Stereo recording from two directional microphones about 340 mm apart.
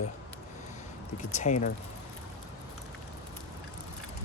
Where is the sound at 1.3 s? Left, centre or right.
Left.